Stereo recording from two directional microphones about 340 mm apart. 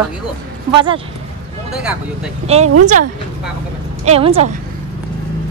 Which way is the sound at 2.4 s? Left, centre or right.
Centre.